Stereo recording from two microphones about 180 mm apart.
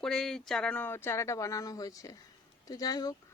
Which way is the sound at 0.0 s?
5° left (ahead or behind).